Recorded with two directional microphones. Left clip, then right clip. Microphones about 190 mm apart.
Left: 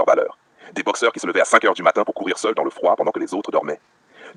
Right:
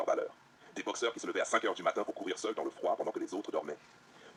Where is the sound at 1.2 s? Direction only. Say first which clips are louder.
Left 18 dB; 45° left (ahead or behind).